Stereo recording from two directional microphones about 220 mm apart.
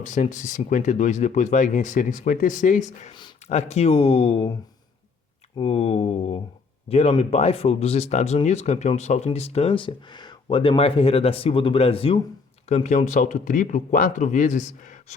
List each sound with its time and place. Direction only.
0.0 s speech: 35° left (ahead or behind)
5.5 s speech: 25° left (ahead or behind)